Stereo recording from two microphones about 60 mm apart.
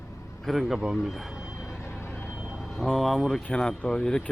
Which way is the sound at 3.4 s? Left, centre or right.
Centre.